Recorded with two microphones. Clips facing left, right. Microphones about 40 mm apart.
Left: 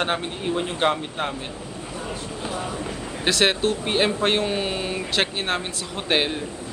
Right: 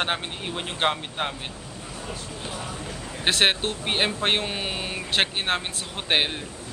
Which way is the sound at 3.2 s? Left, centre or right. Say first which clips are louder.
Left 2 dB; right.